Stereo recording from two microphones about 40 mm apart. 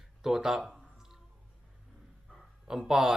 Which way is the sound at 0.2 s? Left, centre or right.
Centre.